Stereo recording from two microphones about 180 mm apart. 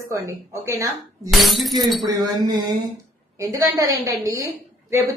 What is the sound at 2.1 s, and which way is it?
A woman's voice, 20° right (ahead or behind).